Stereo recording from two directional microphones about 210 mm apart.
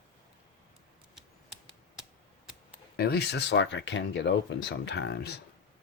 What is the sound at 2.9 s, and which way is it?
Speech, 50° left (ahead or behind).